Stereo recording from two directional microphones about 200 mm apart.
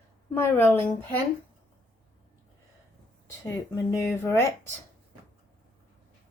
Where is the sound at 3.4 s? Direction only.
15° left (ahead or behind).